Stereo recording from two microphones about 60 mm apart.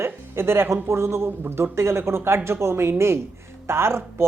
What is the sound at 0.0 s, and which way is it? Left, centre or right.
Speech, right.